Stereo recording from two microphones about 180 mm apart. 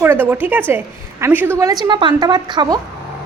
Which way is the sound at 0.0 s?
10° right (ahead or behind).